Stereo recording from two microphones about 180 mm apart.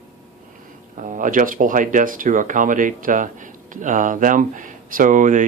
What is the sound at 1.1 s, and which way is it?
Speech, 45° right (ahead or behind).